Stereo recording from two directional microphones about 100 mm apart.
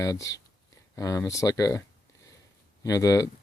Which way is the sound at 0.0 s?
30° left (ahead or behind).